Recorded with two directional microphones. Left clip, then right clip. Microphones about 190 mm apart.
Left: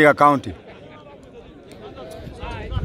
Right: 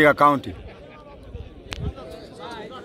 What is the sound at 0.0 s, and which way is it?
Speech, 10° left (ahead or behind).